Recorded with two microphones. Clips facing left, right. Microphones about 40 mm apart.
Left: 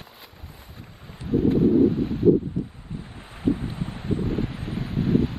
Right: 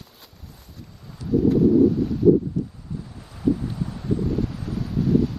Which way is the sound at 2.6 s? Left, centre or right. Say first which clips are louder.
Right 2 dB; left.